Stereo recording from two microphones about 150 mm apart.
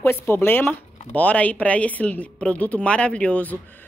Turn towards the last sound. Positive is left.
turn(degrees=10)  # may be behind; listen again after turning